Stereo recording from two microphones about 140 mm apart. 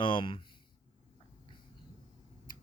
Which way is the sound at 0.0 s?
35° left (ahead or behind).